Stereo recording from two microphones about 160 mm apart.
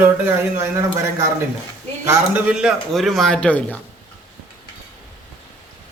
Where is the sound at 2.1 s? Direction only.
10° right (ahead or behind); by 3.8 s 10° left (ahead or behind).